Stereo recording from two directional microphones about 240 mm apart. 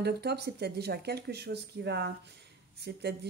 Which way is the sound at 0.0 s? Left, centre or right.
Right.